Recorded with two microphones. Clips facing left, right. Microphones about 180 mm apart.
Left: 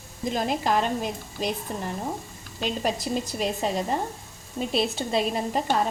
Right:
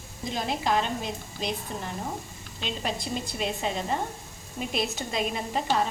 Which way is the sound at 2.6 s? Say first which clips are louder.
Left 5 dB; 45° left (ahead or behind).